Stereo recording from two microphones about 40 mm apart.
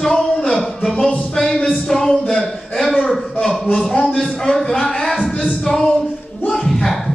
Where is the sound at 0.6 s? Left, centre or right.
Centre.